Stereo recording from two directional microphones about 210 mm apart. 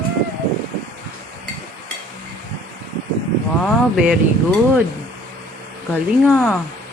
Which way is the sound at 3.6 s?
5° right (ahead or behind).